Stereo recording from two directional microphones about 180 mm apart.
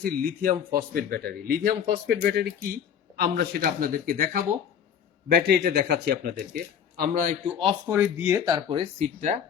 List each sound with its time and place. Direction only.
0.0 s speech: 55° right (ahead or behind)
5.3 s speech: 65° right (ahead or behind)
7.6 s speech: 25° right (ahead or behind)
7.9 s speech: 15° right (ahead or behind); by 9.0 s 30° right (ahead or behind)